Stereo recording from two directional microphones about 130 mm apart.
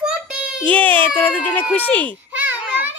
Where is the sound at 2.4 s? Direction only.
15° right (ahead or behind).